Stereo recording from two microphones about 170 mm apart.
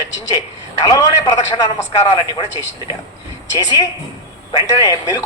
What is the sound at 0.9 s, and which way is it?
A man's voice, 20° left (ahead or behind).